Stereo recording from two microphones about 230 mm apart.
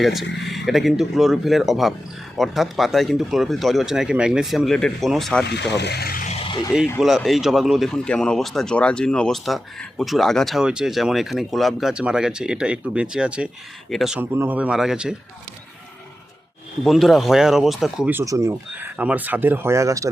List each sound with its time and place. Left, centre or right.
0.0 s speech: centre
5.7 s speech: left
7.0 s speech: centre
16.8 s speech: centre